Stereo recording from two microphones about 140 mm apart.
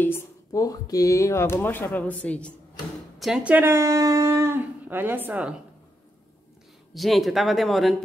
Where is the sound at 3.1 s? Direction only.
5° right (ahead or behind).